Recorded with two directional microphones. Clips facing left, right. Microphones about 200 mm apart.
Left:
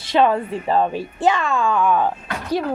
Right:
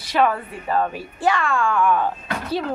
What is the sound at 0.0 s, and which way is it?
A woman's voice, 25° left (ahead or behind).